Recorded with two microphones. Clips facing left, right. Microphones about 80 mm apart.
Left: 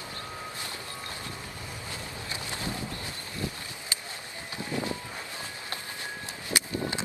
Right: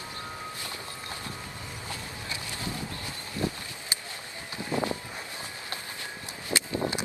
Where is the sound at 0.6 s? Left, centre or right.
Right.